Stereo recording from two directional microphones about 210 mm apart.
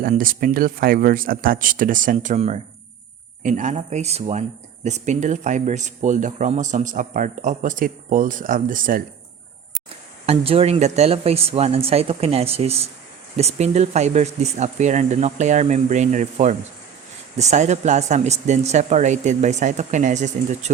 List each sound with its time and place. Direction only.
0.0 s speech: 40° right (ahead or behind)
10.2 s speech: 25° right (ahead or behind)